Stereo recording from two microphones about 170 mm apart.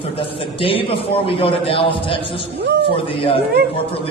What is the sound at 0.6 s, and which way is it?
Speech, 30° left (ahead or behind).